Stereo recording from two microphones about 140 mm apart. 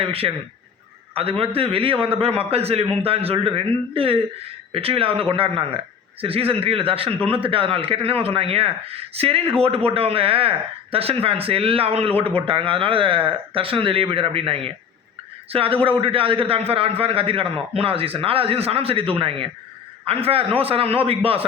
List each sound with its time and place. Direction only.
0.0 s a man's voice: 40° right (ahead or behind)
1.4 s a man's voice: 40° right (ahead or behind)